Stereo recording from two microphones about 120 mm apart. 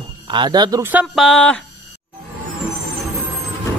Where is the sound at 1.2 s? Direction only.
5° left (ahead or behind).